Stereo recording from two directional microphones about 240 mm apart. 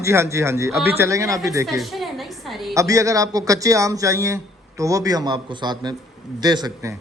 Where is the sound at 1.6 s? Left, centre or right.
Centre.